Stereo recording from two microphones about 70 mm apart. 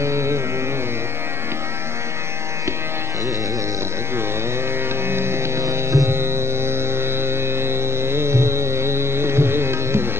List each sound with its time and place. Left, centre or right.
0.0 s music: right
5.1 s music: right